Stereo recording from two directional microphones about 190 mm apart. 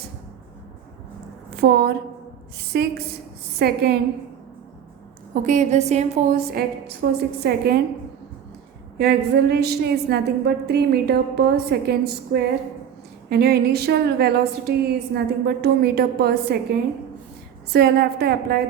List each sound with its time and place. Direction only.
1.5 s a woman's voice: 55° right (ahead or behind)
5.3 s a woman's voice: 40° right (ahead or behind)
6.4 s a woman's voice: 55° right (ahead or behind)
9.0 s a woman's voice: 60° right (ahead or behind)
17.7 s a woman's voice: 55° right (ahead or behind)